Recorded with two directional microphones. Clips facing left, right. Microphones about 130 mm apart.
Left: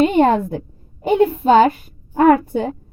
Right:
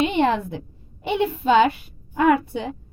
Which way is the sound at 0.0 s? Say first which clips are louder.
Left 6 dB; 45° left (ahead or behind).